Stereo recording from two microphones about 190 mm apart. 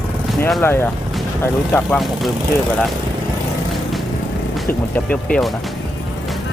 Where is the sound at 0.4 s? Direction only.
10° left (ahead or behind).